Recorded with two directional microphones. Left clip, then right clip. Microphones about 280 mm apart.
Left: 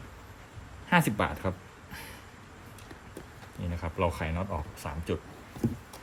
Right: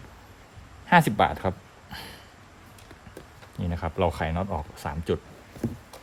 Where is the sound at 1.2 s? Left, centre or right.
Right.